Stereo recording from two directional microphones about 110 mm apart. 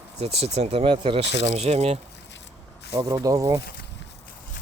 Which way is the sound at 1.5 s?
75° right (ahead or behind).